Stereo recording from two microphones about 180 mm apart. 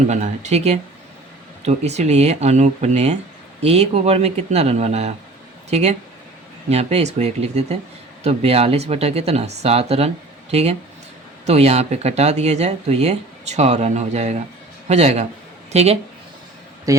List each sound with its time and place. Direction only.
0.1 s speech: 40° right (ahead or behind)